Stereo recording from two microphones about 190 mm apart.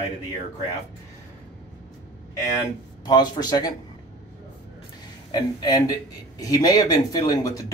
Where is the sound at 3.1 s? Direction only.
20° left (ahead or behind).